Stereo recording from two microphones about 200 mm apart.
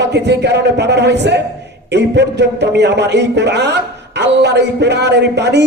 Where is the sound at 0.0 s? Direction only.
60° right (ahead or behind).